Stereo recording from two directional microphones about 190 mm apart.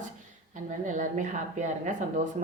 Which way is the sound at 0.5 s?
40° right (ahead or behind).